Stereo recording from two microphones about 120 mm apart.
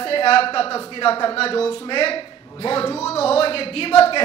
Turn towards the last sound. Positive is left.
turn(degrees=50)  # may be behind; listen again after turning